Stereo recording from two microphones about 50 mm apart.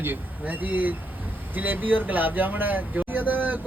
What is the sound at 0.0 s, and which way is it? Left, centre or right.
Speech, right.